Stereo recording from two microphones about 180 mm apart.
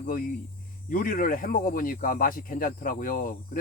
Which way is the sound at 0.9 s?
50° left (ahead or behind).